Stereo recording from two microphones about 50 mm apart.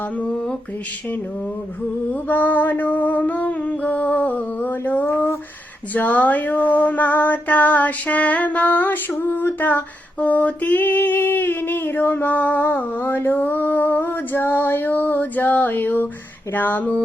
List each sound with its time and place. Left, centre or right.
2.2 s female singing: left
14.0 s female singing: left